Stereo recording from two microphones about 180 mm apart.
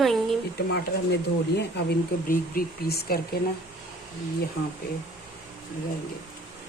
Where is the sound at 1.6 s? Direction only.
60° left (ahead or behind).